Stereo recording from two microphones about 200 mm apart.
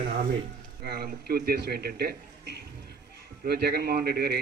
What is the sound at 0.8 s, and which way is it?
A man's voice, 50° right (ahead or behind).